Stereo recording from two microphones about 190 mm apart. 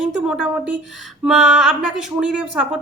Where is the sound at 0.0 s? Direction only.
5° right (ahead or behind).